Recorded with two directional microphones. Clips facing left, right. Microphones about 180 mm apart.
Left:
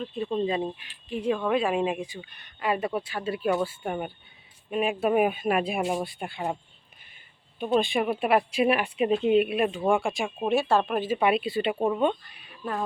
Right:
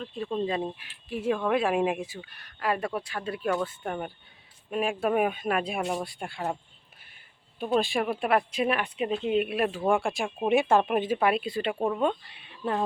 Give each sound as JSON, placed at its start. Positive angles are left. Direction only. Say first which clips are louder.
{"t": 0.0, "sound": "speech", "louder": "left 2 dB", "side_deg": 0}
{"t": 7.6, "sound": "speech", "louder": "left 2 dB", "side_deg": 0}
{"t": 9.5, "sound": "speech", "louder": "left 1 dB", "side_deg": 0}
{"t": 10.5, "sound": "speech", "louder": "right 2 dB", "side_deg": -20}
{"t": 11.2, "sound": "speech", "louder": "left 2 dB", "side_deg": 5}
{"t": 12.3, "sound": "a sound", "louder": "right 3 dB", "side_deg": -25}